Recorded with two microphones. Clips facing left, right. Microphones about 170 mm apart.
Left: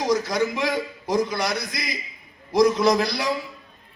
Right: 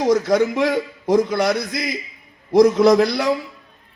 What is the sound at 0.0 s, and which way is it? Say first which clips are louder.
A man's voice: right 6 dB; 55° right (ahead or behind).